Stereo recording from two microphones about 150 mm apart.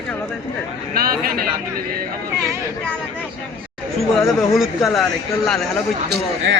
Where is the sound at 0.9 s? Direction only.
80° right.